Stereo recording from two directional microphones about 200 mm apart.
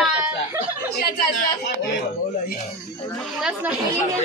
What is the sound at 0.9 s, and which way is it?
Speech, 50° left (ahead or behind).